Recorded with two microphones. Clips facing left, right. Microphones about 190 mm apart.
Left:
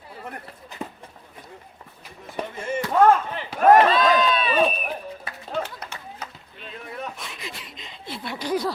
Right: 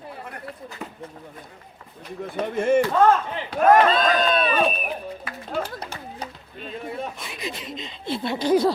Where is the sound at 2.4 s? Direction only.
55° right (ahead or behind).